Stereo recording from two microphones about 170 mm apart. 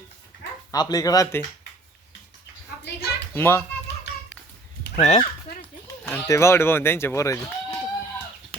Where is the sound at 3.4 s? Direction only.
15° left (ahead or behind).